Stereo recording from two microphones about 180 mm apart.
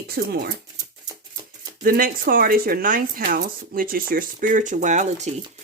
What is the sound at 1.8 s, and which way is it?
Speech, 55° right (ahead or behind).